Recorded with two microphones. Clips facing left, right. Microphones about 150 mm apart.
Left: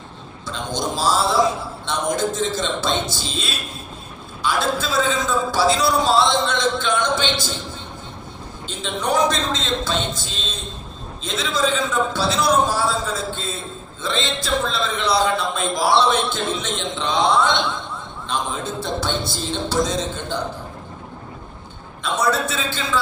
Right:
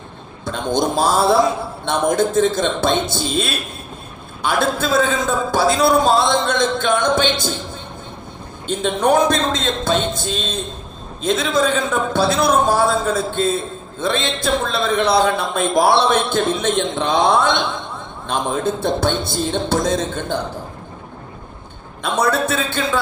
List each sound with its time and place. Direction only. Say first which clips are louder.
0.4 s a man's voice: right 6 dB; 55° right (ahead or behind)
8.6 s speech: right 8 dB; 55° right (ahead or behind)
22.0 s a man's voice: right 3 dB; 55° right (ahead or behind)